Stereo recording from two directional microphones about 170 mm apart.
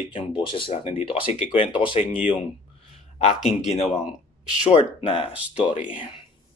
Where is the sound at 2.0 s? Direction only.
45° left (ahead or behind).